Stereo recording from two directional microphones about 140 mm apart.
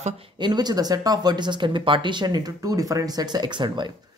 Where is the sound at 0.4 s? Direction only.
30° right (ahead or behind).